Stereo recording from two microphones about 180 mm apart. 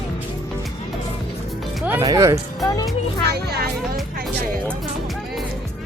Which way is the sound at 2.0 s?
20° right (ahead or behind).